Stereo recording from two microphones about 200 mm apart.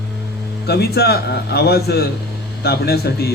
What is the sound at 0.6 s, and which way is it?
Speech, 55° left (ahead or behind).